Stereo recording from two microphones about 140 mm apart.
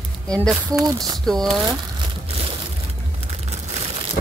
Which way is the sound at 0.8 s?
25° right (ahead or behind).